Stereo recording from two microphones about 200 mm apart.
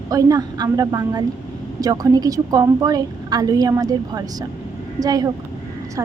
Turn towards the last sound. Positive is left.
turn(degrees=-20)  # may be behind; listen again after turning